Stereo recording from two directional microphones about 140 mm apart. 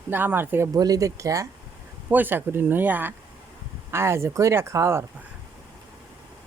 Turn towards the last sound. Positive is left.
turn(degrees=-20)  # may be behind; listen again after turning